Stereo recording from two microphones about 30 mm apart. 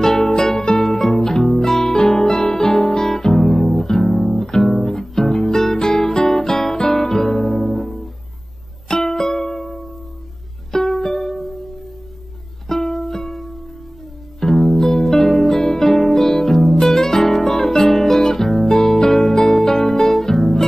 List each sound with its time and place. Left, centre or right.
0.0 s music: centre
1.6 s guitar: centre
3.8 s music: centre
8.8 s music: centre
12.6 s music: centre
14.4 s music: centre